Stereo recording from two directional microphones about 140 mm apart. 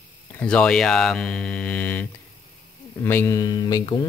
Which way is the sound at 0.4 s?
5° left (ahead or behind).